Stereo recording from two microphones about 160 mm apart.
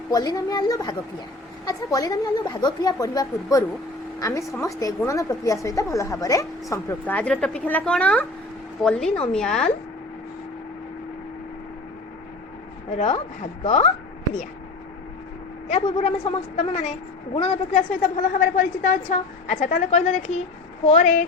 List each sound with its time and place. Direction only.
0.1 s a woman's voice: 25° left (ahead or behind)
7.0 s a woman's voice: 10° left (ahead or behind)
13.7 s a woman's voice: 40° left (ahead or behind)
15.7 s a woman's voice: 40° left (ahead or behind)
18.0 s a woman's voice: 65° left (ahead or behind); by 21.2 s 50° left (ahead or behind)